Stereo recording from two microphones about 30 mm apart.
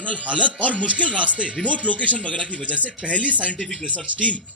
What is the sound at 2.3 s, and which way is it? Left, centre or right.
Speech, left.